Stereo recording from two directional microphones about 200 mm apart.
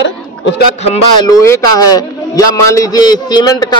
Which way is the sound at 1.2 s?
15° left (ahead or behind).